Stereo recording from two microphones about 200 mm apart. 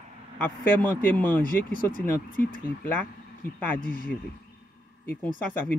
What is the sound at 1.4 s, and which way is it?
Speech, 45° left (ahead or behind).